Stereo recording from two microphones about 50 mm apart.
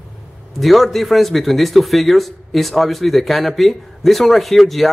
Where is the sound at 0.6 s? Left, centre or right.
Centre.